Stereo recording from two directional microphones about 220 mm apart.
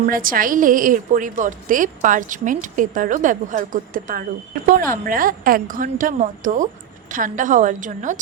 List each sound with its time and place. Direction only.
0.0 s a woman's voice: 40° right (ahead or behind)